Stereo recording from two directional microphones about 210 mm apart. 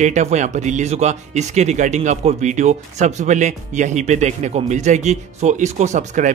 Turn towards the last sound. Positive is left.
turn(degrees=-35)  # may be behind; listen again after turning